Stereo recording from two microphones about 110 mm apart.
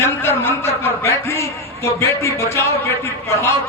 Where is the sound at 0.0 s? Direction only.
20° left (ahead or behind).